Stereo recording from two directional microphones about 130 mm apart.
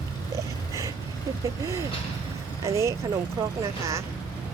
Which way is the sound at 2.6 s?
25° right (ahead or behind).